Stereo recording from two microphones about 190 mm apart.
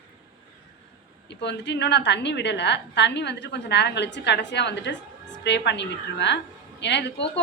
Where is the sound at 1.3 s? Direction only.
65° left (ahead or behind).